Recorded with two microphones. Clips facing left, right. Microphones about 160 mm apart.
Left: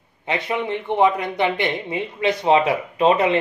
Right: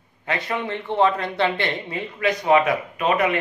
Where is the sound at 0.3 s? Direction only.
20° left (ahead or behind).